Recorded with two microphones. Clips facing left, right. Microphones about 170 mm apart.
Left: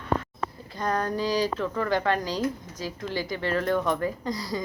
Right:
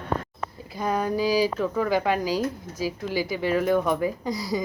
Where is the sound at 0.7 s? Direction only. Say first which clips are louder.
Right 2 dB; 10° right (ahead or behind).